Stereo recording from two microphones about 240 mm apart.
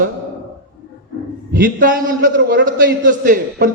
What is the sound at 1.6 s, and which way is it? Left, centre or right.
Speech, right.